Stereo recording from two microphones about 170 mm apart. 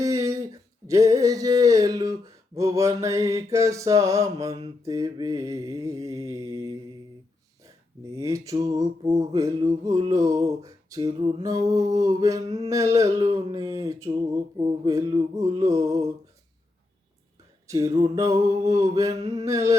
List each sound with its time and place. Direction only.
0.0 s a sound: 20° right (ahead or behind)
4.8 s mantra: 20° right (ahead or behind)
8.1 s mantra: 20° right (ahead or behind)
17.7 s mantra: 20° right (ahead or behind)